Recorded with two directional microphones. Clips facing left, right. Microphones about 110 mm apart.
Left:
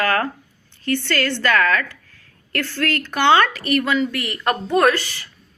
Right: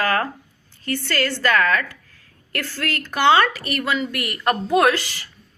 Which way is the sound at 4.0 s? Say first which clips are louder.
Left 3 dB; 50° right (ahead or behind).